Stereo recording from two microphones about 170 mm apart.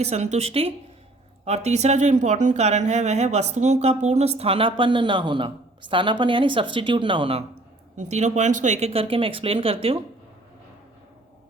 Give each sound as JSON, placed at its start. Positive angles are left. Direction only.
{"t": 0.0, "sound": "speech", "side_deg": -40}
{"t": 7.9, "sound": "speech", "side_deg": -45}